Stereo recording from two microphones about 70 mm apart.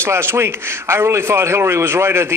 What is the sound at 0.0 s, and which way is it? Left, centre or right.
A man's voice, right.